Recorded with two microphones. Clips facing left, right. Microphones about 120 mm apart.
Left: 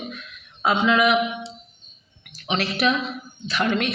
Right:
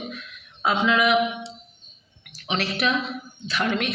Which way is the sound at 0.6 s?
Centre (ahead or behind).